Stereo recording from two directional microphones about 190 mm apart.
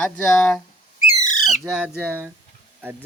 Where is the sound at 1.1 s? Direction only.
40° left (ahead or behind).